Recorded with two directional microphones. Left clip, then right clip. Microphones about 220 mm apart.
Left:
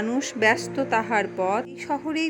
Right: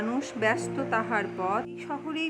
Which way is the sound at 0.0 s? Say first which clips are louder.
Left 6 dB; 10° left (ahead or behind).